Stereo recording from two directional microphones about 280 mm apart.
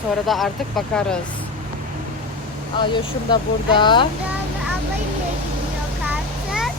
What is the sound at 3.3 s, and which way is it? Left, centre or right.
Speech, centre.